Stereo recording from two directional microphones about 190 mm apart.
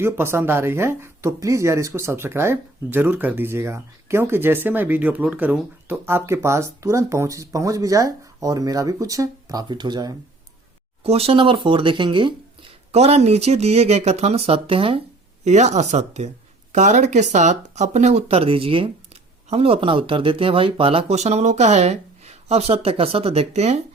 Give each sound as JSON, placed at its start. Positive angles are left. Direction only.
{"t": 0.0, "sound": "speech", "side_deg": -15}
{"t": 11.0, "sound": "speech", "side_deg": -30}